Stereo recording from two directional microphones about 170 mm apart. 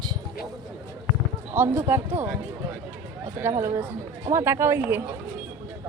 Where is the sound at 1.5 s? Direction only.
15° right (ahead or behind).